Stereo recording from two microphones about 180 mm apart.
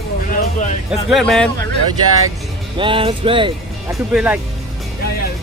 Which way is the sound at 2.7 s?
30° right (ahead or behind).